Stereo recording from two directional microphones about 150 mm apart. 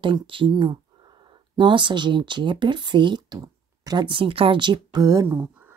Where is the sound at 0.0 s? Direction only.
35° right (ahead or behind).